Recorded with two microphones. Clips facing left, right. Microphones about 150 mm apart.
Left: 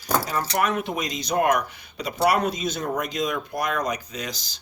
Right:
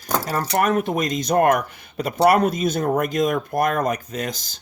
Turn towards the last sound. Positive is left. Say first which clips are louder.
# right 6 dB
turn(degrees=-50)  # may be behind; listen again after turning